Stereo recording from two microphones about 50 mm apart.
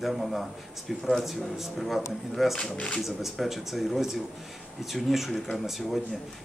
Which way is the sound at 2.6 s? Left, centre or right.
Centre.